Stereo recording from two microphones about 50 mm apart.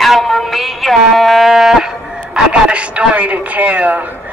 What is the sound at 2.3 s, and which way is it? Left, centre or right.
A man's voice, right.